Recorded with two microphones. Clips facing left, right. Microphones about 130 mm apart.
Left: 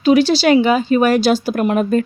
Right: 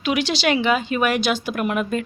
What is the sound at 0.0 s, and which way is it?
Speech, 35° left (ahead or behind).